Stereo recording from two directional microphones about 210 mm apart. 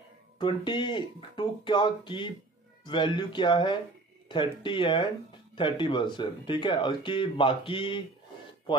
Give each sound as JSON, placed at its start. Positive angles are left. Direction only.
{"t": 0.4, "sound": "speech", "side_deg": 20}